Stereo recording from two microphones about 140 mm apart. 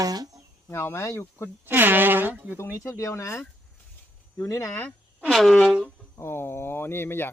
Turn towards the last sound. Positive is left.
turn(degrees=15)  # may be behind; listen again after turning